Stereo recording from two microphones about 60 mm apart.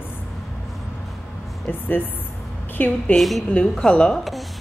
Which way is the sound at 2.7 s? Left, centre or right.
Left.